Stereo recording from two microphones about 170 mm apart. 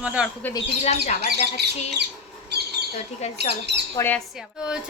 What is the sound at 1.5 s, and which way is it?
Speech, 75° right (ahead or behind).